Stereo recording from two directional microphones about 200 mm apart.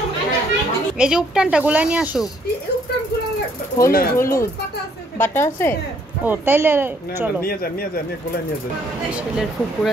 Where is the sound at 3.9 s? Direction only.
45° left (ahead or behind).